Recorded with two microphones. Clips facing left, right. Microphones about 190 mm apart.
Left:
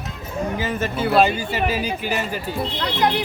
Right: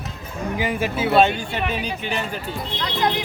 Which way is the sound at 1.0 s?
Centre (ahead or behind).